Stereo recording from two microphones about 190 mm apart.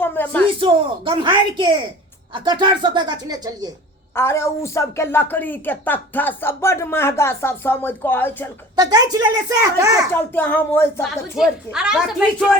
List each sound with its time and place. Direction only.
0.0 s a sound: 10° left (ahead or behind)
0.6 s a woman's voice: 25° right (ahead or behind)
4.1 s a woman's voice: 15° left (ahead or behind)
8.8 s a woman's voice: 20° right (ahead or behind)
10.3 s a woman's voice: 10° left (ahead or behind)
11.3 s a woman's voice: 5° right (ahead or behind)